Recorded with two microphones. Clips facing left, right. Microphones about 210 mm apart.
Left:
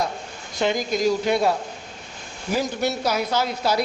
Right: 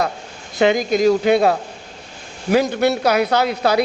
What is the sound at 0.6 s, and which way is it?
Speech, 75° right (ahead or behind).